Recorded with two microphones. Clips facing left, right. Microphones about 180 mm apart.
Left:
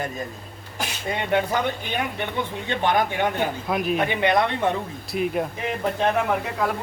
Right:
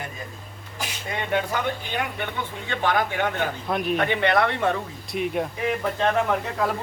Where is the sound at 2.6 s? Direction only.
20° left (ahead or behind).